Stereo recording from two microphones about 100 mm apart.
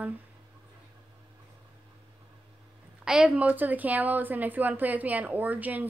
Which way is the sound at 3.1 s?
10° right (ahead or behind).